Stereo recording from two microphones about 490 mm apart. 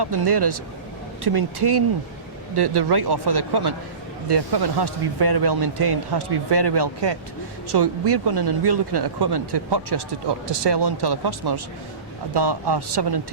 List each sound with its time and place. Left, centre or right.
0.0 s speech: right